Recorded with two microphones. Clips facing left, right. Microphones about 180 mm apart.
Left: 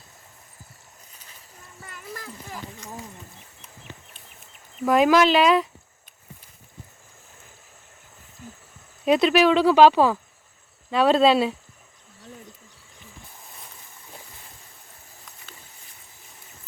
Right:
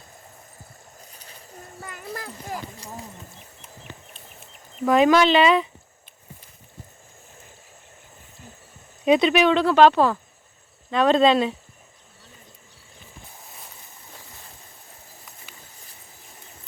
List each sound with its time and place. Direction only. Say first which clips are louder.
1.2 s a sound: right 8 dB; 40° right (ahead or behind)
4.9 s speech: right 1 dB; centre (ahead or behind)
9.0 s speech: even; centre (ahead or behind)